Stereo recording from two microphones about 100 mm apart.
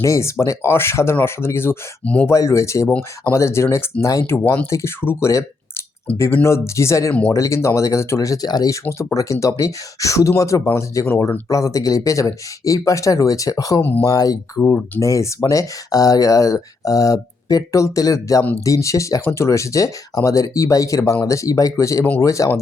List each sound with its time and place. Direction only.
0.0 s speech: 30° left (ahead or behind)
2.0 s speech: 15° left (ahead or behind)
2.3 s speech: 30° left (ahead or behind)
8.8 s speech: 20° left (ahead or behind)